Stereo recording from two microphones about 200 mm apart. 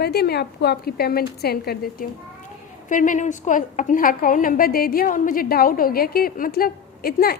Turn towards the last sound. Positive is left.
turn(degrees=50)  # may be behind; listen again after turning